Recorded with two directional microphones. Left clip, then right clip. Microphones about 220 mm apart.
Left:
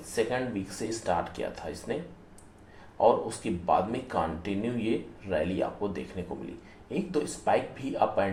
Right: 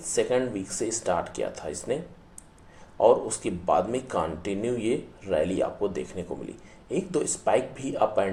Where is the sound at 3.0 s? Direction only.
35° right (ahead or behind).